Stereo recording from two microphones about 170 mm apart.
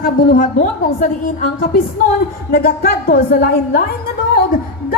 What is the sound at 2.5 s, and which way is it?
A woman's voice, 65° left (ahead or behind).